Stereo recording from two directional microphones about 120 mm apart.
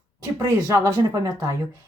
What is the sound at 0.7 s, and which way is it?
Speech, 25° right (ahead or behind).